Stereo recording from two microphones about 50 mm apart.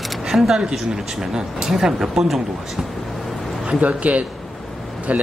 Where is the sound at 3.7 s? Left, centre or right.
Right.